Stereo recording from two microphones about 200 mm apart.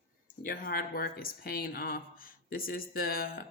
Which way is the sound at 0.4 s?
45° left (ahead or behind).